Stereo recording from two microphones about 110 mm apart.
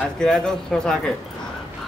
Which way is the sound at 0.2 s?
5° left (ahead or behind).